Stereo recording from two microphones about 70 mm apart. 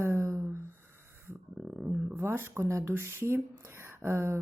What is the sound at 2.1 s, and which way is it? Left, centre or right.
A woman's voice, right.